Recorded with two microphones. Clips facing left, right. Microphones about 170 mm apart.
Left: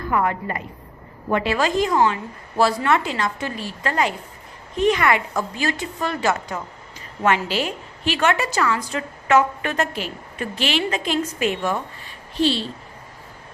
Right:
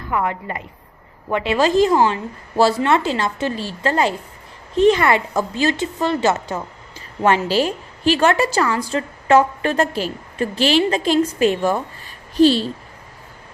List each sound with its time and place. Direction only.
0.1 s a woman's voice: 20° right (ahead or behind); by 12.7 s 40° right (ahead or behind)